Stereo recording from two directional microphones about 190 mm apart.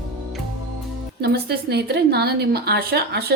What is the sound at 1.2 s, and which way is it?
A woman's voice, 55° right (ahead or behind).